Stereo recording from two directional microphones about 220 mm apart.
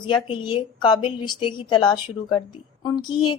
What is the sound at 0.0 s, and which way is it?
A woman's voice, 20° left (ahead or behind).